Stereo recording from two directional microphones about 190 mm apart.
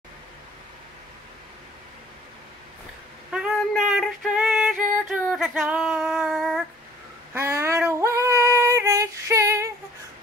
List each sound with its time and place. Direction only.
3.3 s a sound: 5° right (ahead or behind)
5.1 s female singing: 5° right (ahead or behind)
7.3 s female singing: 15° right (ahead or behind)